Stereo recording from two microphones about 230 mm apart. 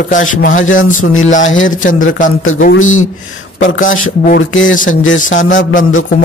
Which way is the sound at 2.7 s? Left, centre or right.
Left.